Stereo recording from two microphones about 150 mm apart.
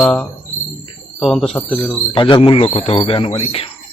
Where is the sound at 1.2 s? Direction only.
Centre (ahead or behind).